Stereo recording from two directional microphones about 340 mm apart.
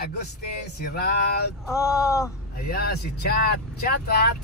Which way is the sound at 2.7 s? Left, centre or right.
Left.